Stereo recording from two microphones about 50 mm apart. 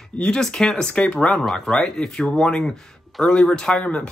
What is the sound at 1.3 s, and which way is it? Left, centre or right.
Speech, centre.